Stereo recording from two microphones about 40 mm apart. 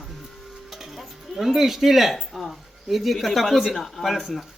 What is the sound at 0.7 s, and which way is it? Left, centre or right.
Music, centre.